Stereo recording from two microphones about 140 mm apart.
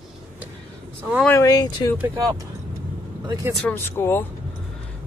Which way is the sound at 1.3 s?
25° left (ahead or behind).